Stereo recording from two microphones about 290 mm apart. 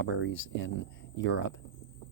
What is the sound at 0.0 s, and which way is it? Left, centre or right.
Speech, left.